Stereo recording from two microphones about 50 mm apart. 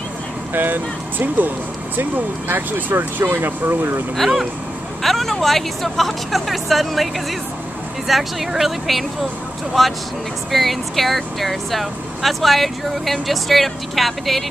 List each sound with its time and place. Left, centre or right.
0.5 s speech: right
5.0 s speech: centre
8.1 s speech: centre